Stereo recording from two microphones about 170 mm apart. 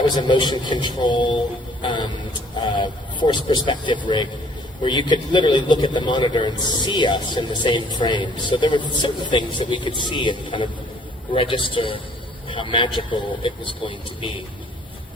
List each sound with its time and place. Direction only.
0.2 s a man's voice: 25° left (ahead or behind)